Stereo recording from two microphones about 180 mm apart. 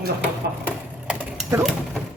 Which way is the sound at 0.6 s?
5° right (ahead or behind).